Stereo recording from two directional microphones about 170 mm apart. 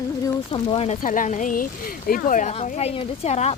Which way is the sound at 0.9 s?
50° left (ahead or behind).